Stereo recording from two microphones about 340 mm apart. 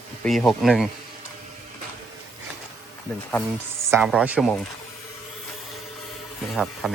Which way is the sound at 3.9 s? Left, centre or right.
Centre.